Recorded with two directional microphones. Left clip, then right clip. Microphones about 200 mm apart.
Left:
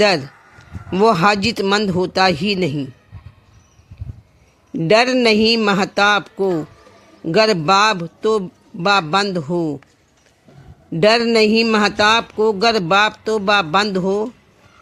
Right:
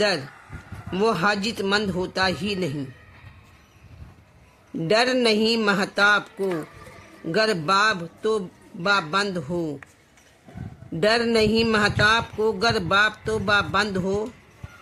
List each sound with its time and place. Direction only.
0.9 s a man's voice: 30° left (ahead or behind)
4.8 s a man's voice: 30° left (ahead or behind)
11.0 s a man's voice: 30° left (ahead or behind)